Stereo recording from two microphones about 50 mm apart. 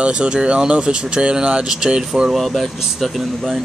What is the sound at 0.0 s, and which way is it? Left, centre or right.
Speech, right.